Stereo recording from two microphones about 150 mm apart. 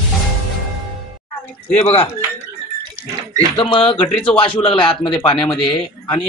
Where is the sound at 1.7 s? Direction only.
45° left (ahead or behind).